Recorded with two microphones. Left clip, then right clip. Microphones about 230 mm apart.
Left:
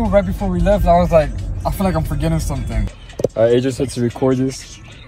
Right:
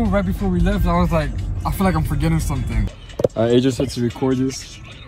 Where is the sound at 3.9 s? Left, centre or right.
Centre.